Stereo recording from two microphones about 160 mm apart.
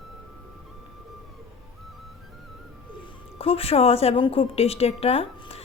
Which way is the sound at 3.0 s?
35° left (ahead or behind).